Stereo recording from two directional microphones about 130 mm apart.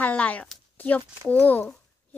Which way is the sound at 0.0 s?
10° left (ahead or behind).